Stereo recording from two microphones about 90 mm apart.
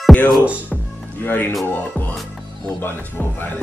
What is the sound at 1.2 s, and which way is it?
Speech, 20° left (ahead or behind).